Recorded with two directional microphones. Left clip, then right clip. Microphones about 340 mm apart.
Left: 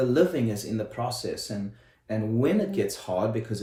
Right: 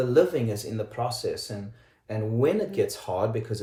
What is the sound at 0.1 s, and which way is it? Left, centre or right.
Speech, centre.